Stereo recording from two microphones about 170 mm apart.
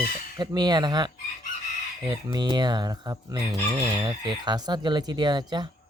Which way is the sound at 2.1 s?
25° right (ahead or behind).